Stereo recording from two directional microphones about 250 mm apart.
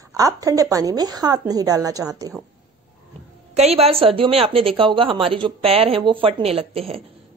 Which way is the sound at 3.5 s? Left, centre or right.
Right.